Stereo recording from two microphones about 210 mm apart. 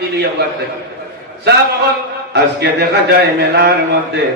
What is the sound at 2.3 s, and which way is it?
A man's voice, 50° right (ahead or behind).